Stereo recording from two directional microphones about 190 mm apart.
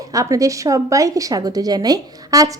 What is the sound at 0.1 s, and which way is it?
A woman's voice, 15° right (ahead or behind).